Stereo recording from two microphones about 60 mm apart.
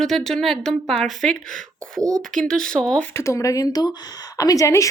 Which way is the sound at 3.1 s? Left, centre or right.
Left.